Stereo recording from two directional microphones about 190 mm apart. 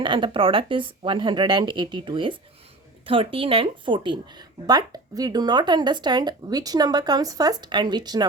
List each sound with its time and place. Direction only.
0.0 s speech: 25° right (ahead or behind)